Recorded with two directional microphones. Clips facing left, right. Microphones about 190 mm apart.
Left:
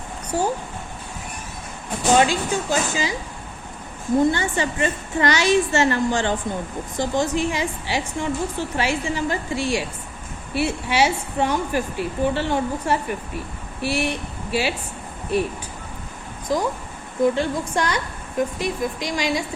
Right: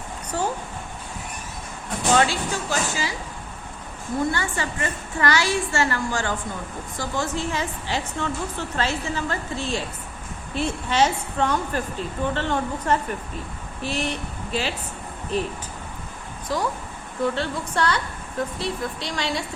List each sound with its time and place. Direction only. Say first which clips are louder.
0.3 s speech: left 3 dB; 10° left (ahead or behind)
2.1 s speech: left 3 dB; 15° left (ahead or behind)
4.2 s a child's voice: left 4 dB; 20° left (ahead or behind)
16.5 s speech: left 3 dB; 15° left (ahead or behind)